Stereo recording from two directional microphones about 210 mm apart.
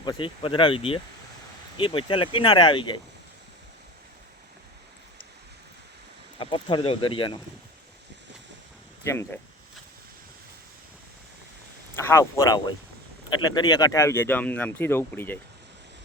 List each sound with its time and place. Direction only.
0.0 s speech: 20° left (ahead or behind)
6.4 s speech: 25° left (ahead or behind)
11.9 s speech: 10° left (ahead or behind)